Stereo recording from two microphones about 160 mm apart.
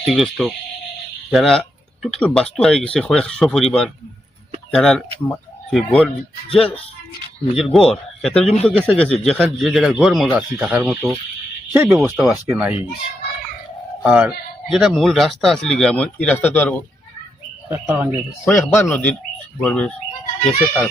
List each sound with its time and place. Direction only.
0.0 s speech: centre (ahead or behind)
7.6 s speech: centre (ahead or behind)
8.4 s speech: 40° left (ahead or behind)
8.6 s speech: 5° left (ahead or behind); by 12.7 s 10° right (ahead or behind)
14.0 s speech: 5° right (ahead or behind); by 16.8 s 10° left (ahead or behind)
17.7 s speech: 10° right (ahead or behind)
18.5 s speech: 15° left (ahead or behind)